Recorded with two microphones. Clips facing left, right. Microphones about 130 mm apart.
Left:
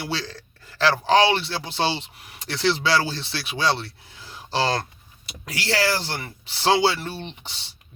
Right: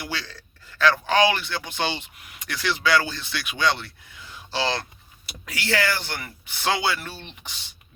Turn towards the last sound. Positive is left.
turn(degrees=30)  # may be behind; listen again after turning